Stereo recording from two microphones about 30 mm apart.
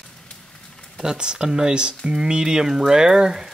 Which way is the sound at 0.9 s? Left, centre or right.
Right.